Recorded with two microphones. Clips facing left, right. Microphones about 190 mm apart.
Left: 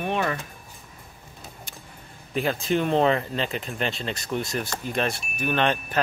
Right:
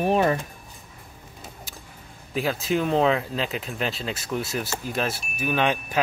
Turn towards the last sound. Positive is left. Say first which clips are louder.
# even
turn(degrees=-10)  # may be behind; listen again after turning